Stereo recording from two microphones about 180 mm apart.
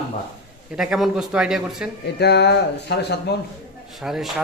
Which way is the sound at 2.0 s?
65° left (ahead or behind).